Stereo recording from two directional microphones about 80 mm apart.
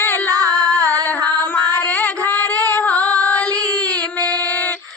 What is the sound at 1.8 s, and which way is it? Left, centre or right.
Female singing, centre.